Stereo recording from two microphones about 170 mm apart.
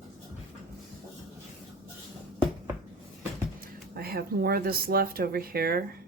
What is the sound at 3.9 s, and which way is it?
Speech, 65° right (ahead or behind).